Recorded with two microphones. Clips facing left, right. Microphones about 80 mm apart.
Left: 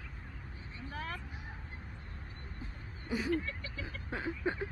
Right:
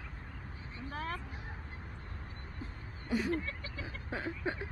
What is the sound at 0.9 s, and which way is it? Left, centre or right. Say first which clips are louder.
Vehicle: right 2 dB; right.